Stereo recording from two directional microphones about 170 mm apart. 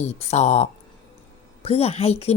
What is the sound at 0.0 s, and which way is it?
A woman's voice, 40° left (ahead or behind).